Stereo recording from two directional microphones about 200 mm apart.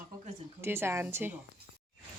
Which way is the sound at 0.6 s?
10° right (ahead or behind).